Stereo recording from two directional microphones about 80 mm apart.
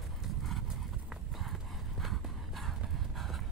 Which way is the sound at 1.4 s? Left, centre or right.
Centre.